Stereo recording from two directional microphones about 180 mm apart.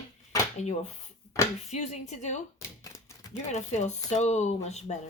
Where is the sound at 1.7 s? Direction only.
40° left (ahead or behind).